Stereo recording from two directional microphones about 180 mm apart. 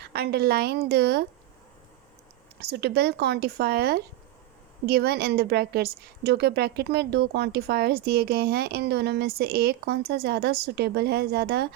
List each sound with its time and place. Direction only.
0.0 s a woman's voice: 60° right (ahead or behind)
2.6 s a woman's voice: 65° right (ahead or behind)